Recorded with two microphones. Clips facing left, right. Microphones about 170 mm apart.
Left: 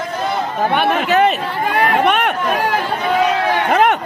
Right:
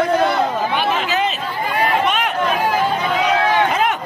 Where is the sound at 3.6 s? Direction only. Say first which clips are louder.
Left 4 dB; 60° left (ahead or behind).